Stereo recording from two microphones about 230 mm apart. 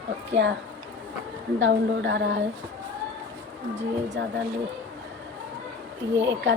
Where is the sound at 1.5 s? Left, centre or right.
Right.